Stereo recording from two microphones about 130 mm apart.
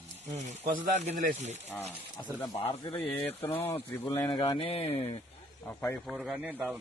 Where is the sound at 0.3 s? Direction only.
65° right (ahead or behind).